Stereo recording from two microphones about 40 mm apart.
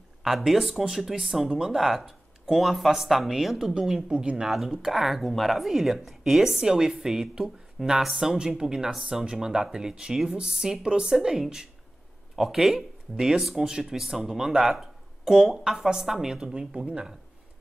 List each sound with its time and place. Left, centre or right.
0.5 s speech: centre
4.1 s speech: right
4.5 s speech: centre
13.4 s speech: centre
13.7 s speech: centre
16.7 s speech: right